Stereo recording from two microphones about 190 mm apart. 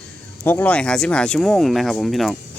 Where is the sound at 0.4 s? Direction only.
10° left (ahead or behind).